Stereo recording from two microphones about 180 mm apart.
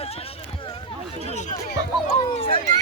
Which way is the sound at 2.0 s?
40° left (ahead or behind).